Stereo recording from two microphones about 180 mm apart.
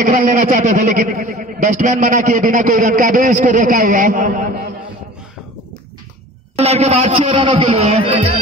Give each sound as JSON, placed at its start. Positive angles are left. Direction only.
{"t": 0.0, "sound": "a man's voice", "side_deg": -45}
{"t": 6.5, "sound": "a man's voice", "side_deg": -35}